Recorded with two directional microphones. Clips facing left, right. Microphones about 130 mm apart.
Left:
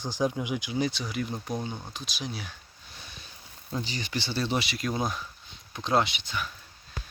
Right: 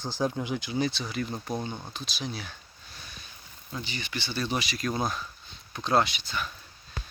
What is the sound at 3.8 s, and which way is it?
Speech, 35° left (ahead or behind).